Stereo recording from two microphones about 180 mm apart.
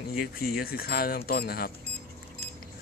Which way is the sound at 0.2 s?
55° left (ahead or behind).